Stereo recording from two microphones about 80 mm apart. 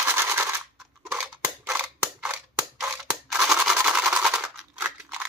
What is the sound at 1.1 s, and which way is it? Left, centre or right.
Scissors, centre.